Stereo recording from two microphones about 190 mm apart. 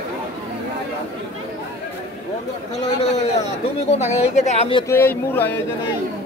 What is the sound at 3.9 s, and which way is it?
Speech, 35° left (ahead or behind).